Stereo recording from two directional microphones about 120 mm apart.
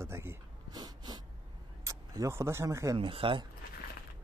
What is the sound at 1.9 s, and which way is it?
Speech, 25° right (ahead or behind).